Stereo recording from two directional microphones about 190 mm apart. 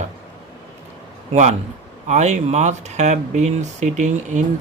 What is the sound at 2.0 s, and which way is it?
A man's voice, 35° right (ahead or behind).